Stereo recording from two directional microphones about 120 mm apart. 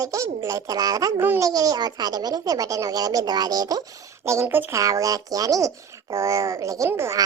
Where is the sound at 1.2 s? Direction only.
15° right (ahead or behind).